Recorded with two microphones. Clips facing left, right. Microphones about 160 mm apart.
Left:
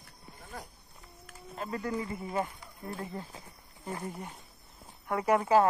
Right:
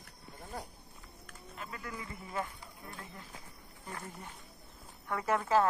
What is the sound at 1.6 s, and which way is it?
Speech, 35° left (ahead or behind).